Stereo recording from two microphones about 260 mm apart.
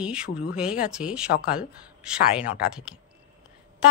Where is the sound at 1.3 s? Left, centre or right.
Left.